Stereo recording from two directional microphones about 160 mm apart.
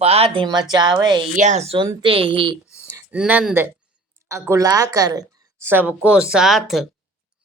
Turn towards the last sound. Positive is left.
turn(degrees=0)  # may be behind; listen again after turning